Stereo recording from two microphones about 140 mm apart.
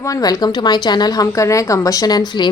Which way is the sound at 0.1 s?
25° left (ahead or behind).